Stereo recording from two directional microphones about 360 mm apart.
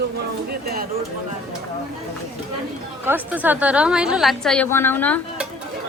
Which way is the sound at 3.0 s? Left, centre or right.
Centre.